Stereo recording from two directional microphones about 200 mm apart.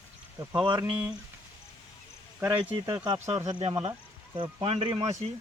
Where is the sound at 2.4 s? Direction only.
10° right (ahead or behind).